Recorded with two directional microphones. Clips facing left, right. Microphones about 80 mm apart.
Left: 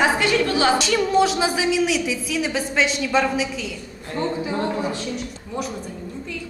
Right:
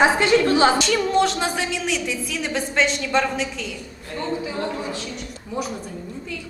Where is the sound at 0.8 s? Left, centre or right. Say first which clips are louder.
Left 1 dB; centre.